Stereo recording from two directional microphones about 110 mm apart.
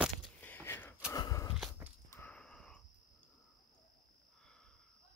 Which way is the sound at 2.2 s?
10° left (ahead or behind).